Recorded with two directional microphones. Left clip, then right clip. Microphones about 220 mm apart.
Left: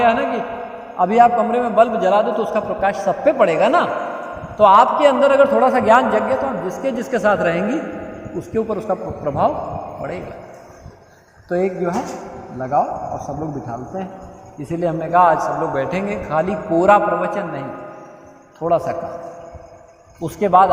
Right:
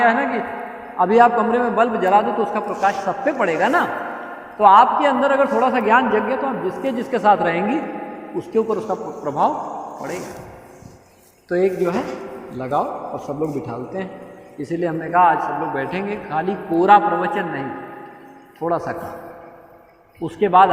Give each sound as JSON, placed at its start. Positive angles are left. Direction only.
{"t": 0.0, "sound": "a woman's voice", "side_deg": 45}
{"t": 11.4, "sound": "a man's voice", "side_deg": 35}
{"t": 20.2, "sound": "a man's voice", "side_deg": 45}